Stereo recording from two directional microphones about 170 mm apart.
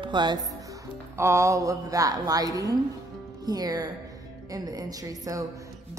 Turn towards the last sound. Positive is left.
turn(degrees=-20)  # may be behind; listen again after turning